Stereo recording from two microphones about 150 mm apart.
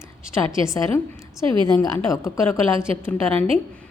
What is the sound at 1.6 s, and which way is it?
Speech, 25° left (ahead or behind).